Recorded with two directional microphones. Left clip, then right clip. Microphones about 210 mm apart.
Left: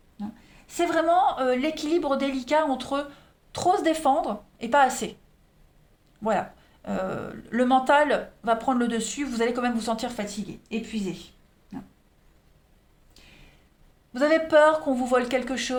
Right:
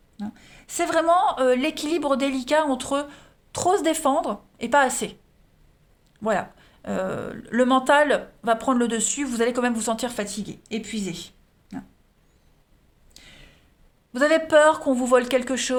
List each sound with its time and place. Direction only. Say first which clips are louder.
0.7 s speech: right 2 dB; 45° right (ahead or behind)
6.2 s speech: right 1 dB; 30° right (ahead or behind)
14.1 s speech: right 2 dB; 40° right (ahead or behind)